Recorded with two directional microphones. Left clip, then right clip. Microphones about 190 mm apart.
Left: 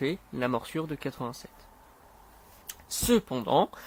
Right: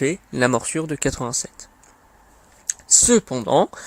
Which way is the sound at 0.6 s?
15° right (ahead or behind).